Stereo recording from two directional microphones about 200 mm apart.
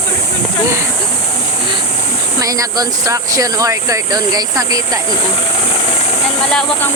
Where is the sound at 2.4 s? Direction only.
15° right (ahead or behind).